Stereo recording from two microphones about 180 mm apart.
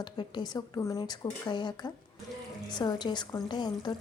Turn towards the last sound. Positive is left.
turn(degrees=25)  # may be behind; listen again after turning